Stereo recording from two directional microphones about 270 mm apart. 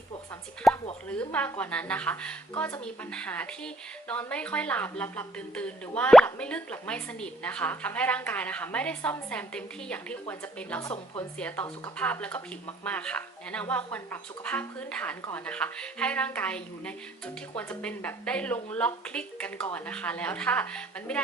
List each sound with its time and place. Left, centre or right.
0.6 s a sound: centre
1.0 s speech: centre
10.9 s speech: centre
11.3 s speech: centre